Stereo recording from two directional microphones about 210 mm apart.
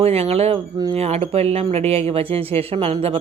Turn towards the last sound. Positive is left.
turn(degrees=-25)  # may be behind; listen again after turning